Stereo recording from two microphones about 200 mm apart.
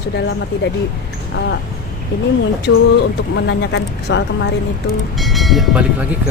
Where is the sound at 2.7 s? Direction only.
65° left (ahead or behind).